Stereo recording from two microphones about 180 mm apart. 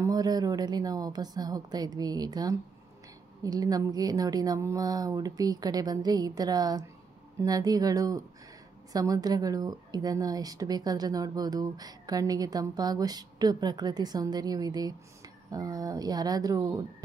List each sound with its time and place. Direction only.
0.0 s speech: 20° right (ahead or behind)